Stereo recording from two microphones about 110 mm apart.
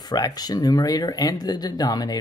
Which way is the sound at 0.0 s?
35° left (ahead or behind).